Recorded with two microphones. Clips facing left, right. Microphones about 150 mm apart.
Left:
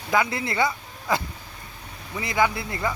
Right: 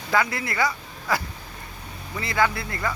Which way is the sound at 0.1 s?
20° left (ahead or behind).